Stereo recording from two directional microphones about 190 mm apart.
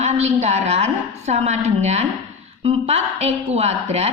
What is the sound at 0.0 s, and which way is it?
A woman's voice, 35° right (ahead or behind).